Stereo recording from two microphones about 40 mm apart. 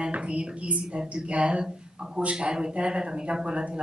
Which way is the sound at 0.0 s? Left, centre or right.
Right.